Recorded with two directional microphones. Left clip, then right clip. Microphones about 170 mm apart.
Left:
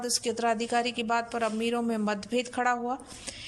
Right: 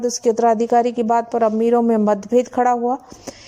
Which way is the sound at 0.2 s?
35° right (ahead or behind).